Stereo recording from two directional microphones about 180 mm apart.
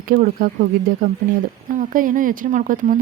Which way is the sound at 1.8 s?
50° right (ahead or behind).